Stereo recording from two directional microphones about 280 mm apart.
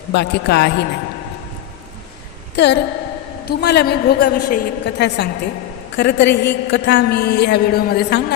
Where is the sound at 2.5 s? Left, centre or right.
Left.